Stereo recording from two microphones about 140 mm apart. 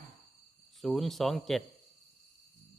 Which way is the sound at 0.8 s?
Centre (ahead or behind).